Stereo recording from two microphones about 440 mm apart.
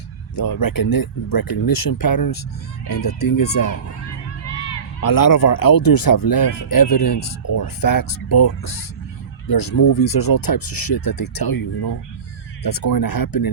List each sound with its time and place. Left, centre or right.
0.3 s speech: left
4.9 s speech: left